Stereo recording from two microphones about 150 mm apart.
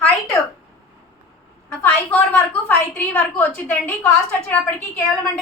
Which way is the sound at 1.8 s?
10° left (ahead or behind).